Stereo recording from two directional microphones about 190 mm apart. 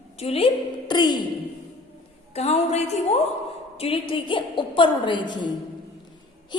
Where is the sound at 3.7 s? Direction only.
30° left (ahead or behind).